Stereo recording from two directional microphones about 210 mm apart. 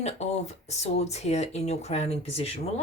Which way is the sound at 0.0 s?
30° left (ahead or behind).